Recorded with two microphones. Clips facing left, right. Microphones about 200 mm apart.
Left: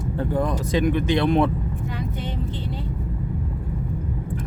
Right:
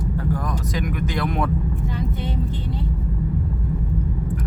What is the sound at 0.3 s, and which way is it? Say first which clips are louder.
Speech: left 5 dB; 25° left (ahead or behind).